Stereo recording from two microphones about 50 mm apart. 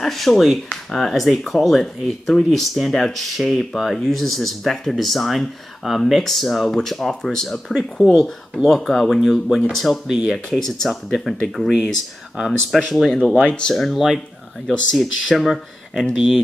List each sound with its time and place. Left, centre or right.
0.0 s speech: centre
10.0 s speech: centre
10.3 s speech: centre
12.4 s speech: centre
13.3 s speech: left
13.9 s speech: centre
16.2 s speech: centre